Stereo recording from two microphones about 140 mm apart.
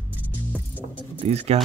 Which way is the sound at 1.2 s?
50° right (ahead or behind).